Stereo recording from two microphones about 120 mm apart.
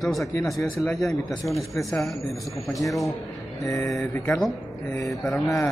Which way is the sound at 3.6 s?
25° left (ahead or behind).